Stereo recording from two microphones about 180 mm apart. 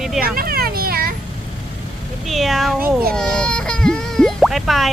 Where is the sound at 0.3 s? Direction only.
55° right (ahead or behind).